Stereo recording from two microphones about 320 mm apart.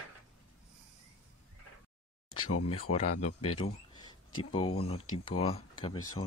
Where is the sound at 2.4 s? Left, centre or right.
Left.